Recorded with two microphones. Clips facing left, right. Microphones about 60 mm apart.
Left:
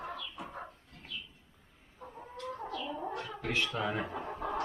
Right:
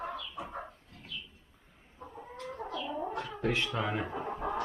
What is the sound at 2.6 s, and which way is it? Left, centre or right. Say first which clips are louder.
Gargling: right 3 dB; right.